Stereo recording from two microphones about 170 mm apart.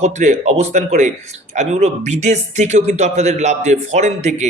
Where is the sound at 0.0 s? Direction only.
40° right (ahead or behind).